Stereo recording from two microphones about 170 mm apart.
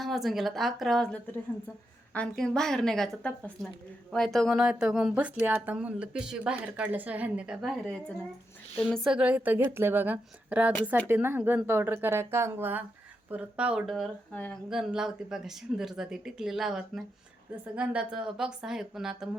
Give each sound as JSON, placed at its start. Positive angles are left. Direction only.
{"t": 0.0, "sound": "speech", "side_deg": 0}
{"t": 8.7, "sound": "a woman's voice", "side_deg": 5}
{"t": 9.0, "sound": "speech", "side_deg": -5}